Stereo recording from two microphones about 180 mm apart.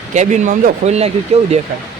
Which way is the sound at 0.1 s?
40° right (ahead or behind).